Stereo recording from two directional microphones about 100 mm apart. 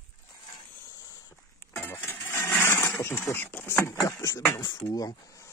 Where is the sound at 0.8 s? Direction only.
35° left (ahead or behind).